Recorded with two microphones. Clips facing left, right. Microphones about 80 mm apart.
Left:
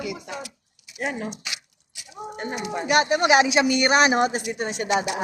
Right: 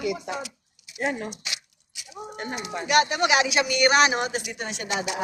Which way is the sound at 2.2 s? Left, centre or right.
Left.